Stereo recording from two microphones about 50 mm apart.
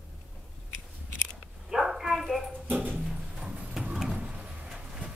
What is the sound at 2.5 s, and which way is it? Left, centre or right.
Dog, right.